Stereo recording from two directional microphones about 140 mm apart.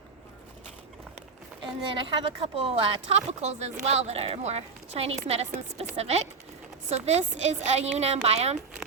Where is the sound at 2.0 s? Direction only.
40° right (ahead or behind).